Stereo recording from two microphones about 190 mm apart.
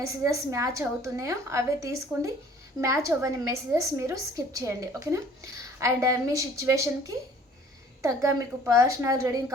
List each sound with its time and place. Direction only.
0.0 s a woman's voice: 15° right (ahead or behind)
8.0 s a woman's voice: 15° right (ahead or behind)